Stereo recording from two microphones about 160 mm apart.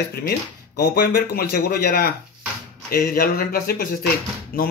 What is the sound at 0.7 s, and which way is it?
Speech, 80° left.